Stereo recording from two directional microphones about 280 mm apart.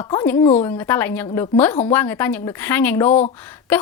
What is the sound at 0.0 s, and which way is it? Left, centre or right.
Speech, centre.